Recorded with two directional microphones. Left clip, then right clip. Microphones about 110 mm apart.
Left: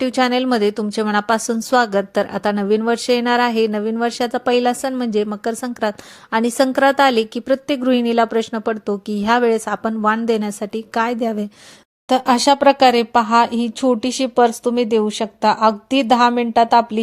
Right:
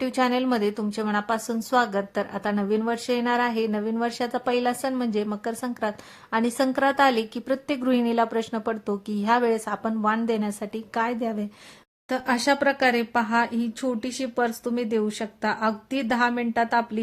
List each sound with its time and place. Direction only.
0.0 s a woman's voice: 45° left (ahead or behind)
12.0 s a woman's voice: 60° left (ahead or behind)